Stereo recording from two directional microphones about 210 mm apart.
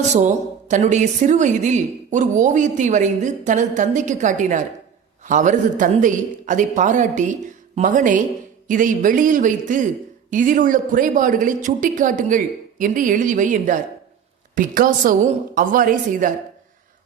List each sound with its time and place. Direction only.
0.1 s a woman's voice: 35° right (ahead or behind)